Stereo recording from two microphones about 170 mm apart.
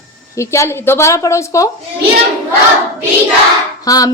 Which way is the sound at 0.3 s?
15° left (ahead or behind).